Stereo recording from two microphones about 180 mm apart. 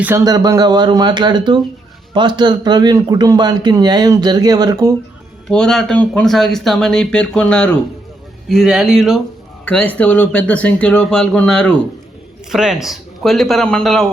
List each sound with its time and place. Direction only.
0.0 s a man's voice: 15° right (ahead or behind)
5.5 s speech: 5° left (ahead or behind)